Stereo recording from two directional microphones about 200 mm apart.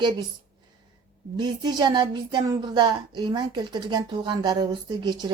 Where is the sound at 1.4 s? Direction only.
20° right (ahead or behind).